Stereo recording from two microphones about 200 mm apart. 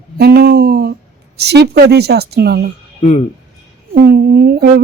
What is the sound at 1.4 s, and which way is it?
Speech, 55° right (ahead or behind).